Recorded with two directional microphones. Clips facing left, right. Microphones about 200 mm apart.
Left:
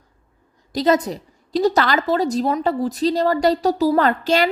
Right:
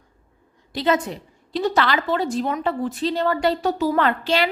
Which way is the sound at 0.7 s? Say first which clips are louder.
Left 4 dB; 40° left (ahead or behind).